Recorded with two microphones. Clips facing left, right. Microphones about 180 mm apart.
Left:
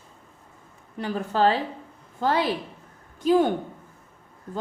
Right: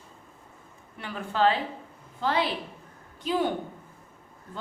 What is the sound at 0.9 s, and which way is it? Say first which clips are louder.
A woman's voice: left 5 dB; 40° left (ahead or behind).